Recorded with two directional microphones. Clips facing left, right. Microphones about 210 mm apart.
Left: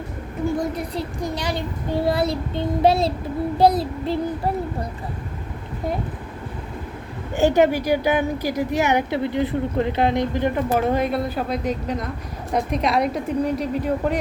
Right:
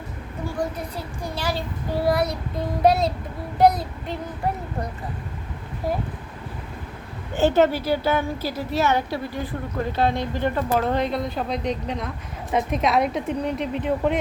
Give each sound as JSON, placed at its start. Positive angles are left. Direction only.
{"t": 1.4, "sound": "child singing", "side_deg": 20}
{"t": 7.3, "sound": "a woman's voice", "side_deg": 15}